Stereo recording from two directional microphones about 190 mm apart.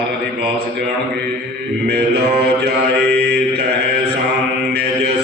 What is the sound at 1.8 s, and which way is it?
Mantra, 55° right (ahead or behind).